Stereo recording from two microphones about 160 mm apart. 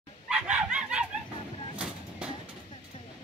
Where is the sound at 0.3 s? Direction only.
5° right (ahead or behind).